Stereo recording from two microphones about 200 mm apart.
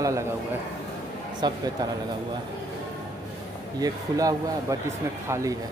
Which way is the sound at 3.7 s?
20° right (ahead or behind).